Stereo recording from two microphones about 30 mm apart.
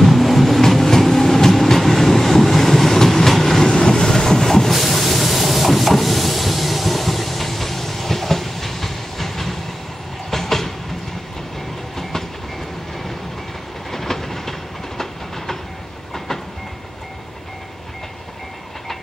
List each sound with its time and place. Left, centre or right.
0.0 s vehicle: centre
0.6 s train: centre
4.7 s vehicle: centre
10.3 s train: centre
12.0 s train: centre
13.9 s train: centre